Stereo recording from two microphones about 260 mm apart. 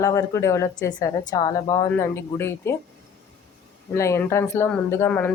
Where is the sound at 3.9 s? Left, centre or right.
Centre.